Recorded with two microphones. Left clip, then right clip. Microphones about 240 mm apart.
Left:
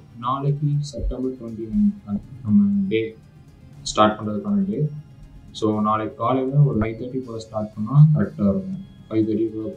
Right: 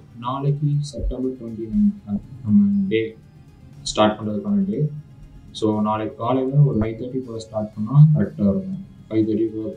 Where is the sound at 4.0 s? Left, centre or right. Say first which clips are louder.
Left 1 dB; right.